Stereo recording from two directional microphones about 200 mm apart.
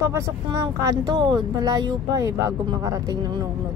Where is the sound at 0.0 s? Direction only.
15° right (ahead or behind).